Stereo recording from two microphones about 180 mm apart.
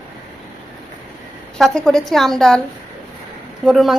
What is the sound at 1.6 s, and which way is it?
A woman's voice, 5° left (ahead or behind).